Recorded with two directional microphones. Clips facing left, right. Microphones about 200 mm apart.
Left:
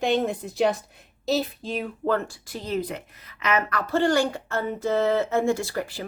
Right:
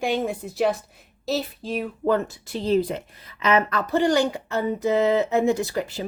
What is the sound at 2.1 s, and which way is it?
A woman's voice, 20° right (ahead or behind).